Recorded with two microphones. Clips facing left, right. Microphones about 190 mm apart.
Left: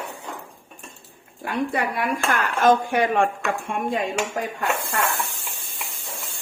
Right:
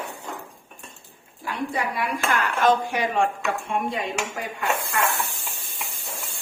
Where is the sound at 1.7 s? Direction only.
55° left (ahead or behind).